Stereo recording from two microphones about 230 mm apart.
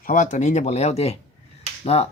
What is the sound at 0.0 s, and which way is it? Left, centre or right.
Speech, left.